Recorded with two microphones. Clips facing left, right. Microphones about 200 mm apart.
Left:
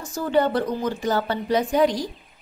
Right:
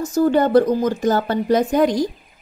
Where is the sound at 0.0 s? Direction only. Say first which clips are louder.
Right 5 dB; 40° right (ahead or behind).